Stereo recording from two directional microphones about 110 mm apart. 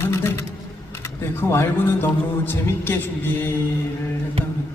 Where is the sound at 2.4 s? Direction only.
15° left (ahead or behind).